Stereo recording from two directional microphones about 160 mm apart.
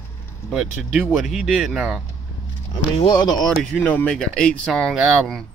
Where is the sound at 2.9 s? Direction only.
30° left (ahead or behind).